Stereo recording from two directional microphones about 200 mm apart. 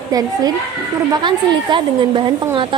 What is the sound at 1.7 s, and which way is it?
Speech, 25° right (ahead or behind).